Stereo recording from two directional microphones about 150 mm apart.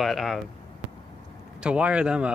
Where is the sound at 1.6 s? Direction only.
10° right (ahead or behind).